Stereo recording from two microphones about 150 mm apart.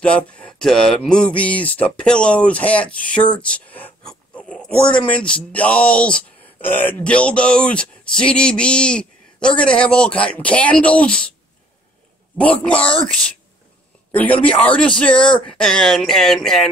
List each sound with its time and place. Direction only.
0.0 s speech: 10° left (ahead or behind)
12.4 s speech: 10° left (ahead or behind)